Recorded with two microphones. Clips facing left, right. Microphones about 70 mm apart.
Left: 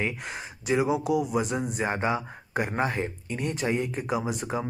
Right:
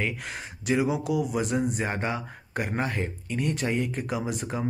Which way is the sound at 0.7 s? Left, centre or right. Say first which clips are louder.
Left 2 dB; centre.